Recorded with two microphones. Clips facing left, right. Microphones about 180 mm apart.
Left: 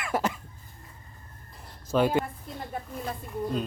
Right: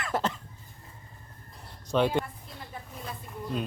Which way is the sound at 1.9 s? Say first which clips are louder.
Left 2 dB; 5° left (ahead or behind).